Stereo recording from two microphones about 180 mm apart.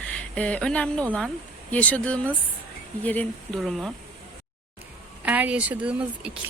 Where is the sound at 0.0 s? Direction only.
5° left (ahead or behind).